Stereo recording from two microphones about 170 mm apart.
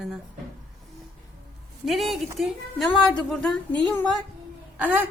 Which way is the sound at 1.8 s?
Centre (ahead or behind).